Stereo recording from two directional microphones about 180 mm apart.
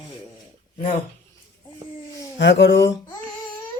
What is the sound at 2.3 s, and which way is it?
Speech, 75° left (ahead or behind).